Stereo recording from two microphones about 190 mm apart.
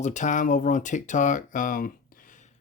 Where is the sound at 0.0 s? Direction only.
40° left (ahead or behind).